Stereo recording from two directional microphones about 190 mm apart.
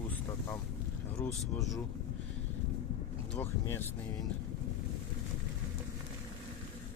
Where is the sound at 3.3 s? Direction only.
10° left (ahead or behind).